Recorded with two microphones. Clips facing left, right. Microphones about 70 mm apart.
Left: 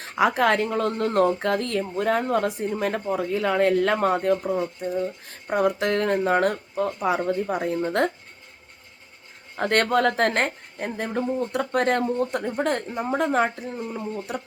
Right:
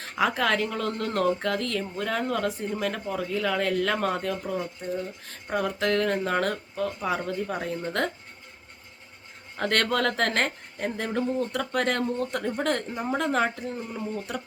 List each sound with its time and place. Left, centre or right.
0.0 s a sound: centre
0.3 s speech: left
4.5 s speech: centre
5.5 s speech: left
9.6 s speech: left
10.8 s a sound: centre
11.0 s speech: centre
11.7 s speech: left
12.4 s speech: centre
13.7 s speech: centre